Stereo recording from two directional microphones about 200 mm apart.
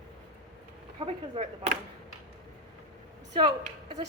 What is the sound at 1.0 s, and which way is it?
Speech, 30° right (ahead or behind).